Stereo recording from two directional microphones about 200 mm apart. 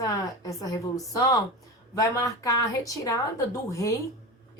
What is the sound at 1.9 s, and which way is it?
A woman's voice, 15° left (ahead or behind).